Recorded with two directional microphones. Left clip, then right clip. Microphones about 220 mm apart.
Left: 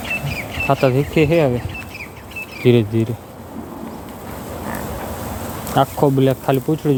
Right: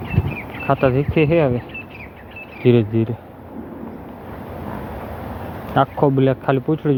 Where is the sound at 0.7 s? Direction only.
Centre (ahead or behind).